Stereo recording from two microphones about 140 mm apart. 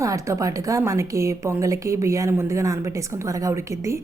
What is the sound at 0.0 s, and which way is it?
A woman's voice, 20° right (ahead or behind).